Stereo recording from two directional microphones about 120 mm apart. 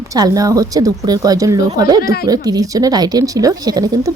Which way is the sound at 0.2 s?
30° right (ahead or behind).